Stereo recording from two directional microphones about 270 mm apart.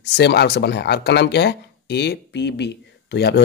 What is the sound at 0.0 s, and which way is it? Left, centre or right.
Speech, left.